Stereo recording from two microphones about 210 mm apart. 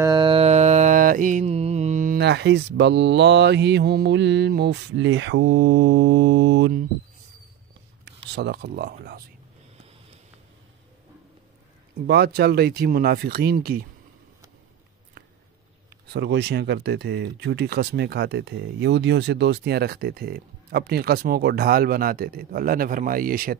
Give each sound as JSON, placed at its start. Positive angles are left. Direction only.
{"t": 0.0, "sound": "mantra", "side_deg": -20}
{"t": 2.1, "sound": "speech", "side_deg": -55}
{"t": 8.0, "sound": "speech", "side_deg": -55}
{"t": 12.1, "sound": "speech", "side_deg": -50}
{"t": 16.1, "sound": "speech", "side_deg": -55}